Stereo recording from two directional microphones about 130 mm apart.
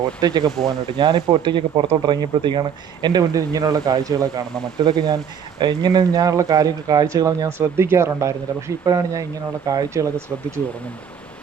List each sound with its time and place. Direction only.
0.2 s speech: 30° right (ahead or behind)
0.4 s speech: centre (ahead or behind)
0.9 s speech: 35° right (ahead or behind)